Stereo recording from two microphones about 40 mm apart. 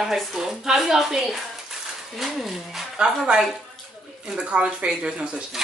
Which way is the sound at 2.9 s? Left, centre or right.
Right.